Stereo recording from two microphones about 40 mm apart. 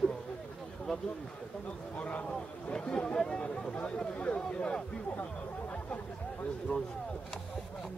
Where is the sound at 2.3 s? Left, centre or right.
Left.